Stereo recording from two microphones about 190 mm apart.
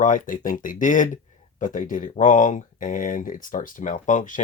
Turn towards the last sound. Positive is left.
turn(degrees=40)  # may be behind; listen again after turning